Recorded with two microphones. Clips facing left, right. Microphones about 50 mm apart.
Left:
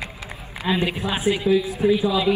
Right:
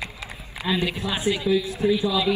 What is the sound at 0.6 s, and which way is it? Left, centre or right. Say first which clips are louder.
Speech: left 2 dB; centre.